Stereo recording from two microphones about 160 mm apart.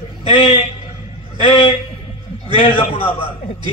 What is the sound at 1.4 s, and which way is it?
A man's voice, 35° left (ahead or behind).